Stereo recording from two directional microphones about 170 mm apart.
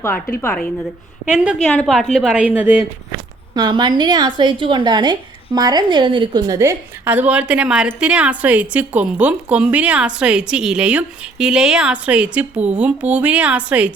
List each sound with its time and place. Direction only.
0.4 s a woman's voice: 10° left (ahead or behind)
1.2 s a woman's voice: 5° right (ahead or behind)
3.5 s a woman's voice: 25° right (ahead or behind)
6.6 s a woman's voice: 15° right (ahead or behind)